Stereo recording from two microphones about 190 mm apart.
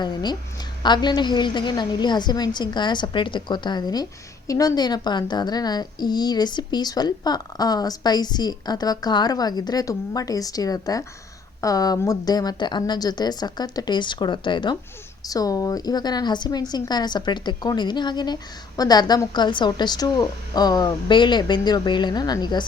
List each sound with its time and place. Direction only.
0.0 s a child's voice: 20° left (ahead or behind)